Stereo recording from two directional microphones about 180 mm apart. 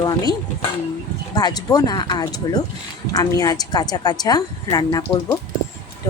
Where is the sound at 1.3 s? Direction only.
20° left (ahead or behind).